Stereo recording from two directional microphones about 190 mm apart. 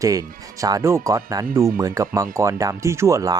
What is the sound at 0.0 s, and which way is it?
Speech, 20° right (ahead or behind).